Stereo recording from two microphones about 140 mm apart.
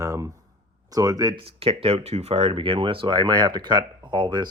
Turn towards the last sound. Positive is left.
turn(degrees=-35)  # may be behind; listen again after turning